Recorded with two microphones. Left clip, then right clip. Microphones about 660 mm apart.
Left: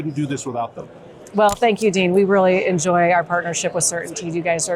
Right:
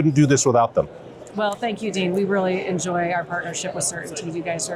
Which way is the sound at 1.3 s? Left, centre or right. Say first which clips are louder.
Left 8 dB; left.